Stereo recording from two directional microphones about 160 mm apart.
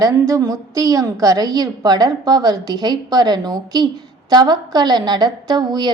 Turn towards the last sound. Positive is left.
turn(degrees=-25)  # may be behind; listen again after turning